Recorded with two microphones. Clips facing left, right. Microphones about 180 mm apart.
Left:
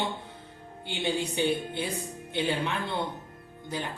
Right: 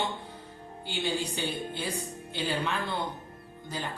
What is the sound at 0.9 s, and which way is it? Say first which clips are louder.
Speech: left 2 dB; 20° left (ahead or behind).